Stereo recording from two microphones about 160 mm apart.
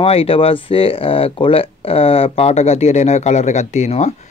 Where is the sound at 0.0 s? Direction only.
35° left (ahead or behind).